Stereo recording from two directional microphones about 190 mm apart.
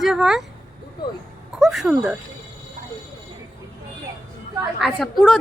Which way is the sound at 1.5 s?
Centre (ahead or behind).